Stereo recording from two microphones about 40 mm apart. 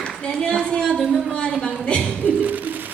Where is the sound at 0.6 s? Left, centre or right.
Left.